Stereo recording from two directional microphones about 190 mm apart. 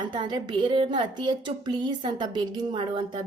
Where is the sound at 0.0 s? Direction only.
25° right (ahead or behind).